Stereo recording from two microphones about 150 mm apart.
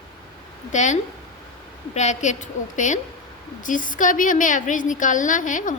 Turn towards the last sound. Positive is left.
turn(degrees=60)  # may be behind; listen again after turning